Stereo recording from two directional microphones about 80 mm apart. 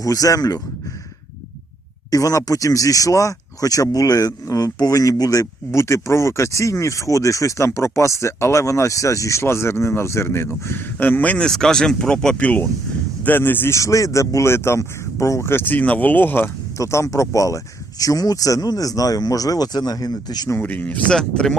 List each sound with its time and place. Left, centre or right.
0.0 s speech: left
2.0 s speech: left
13.7 s speech: left
16.7 s speech: left
20.6 s speech: left
21.2 s speech: centre